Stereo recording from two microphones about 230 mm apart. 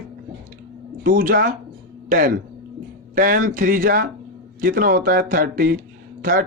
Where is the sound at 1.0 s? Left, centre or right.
Right.